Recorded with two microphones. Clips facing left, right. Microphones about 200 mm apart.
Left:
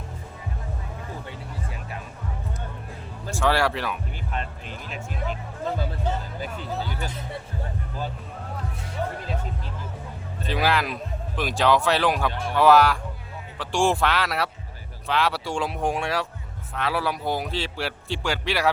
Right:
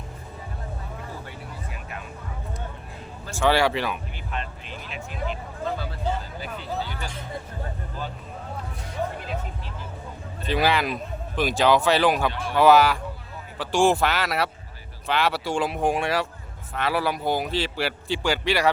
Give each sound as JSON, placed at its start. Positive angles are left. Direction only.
{"t": 3.3, "sound": "a man's voice", "side_deg": 0}
{"t": 6.4, "sound": "speech", "side_deg": 45}
{"t": 10.4, "sound": "a man's voice", "side_deg": 0}